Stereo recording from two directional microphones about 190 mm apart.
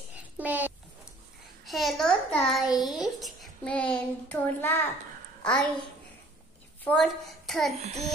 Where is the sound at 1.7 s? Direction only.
Centre (ahead or behind).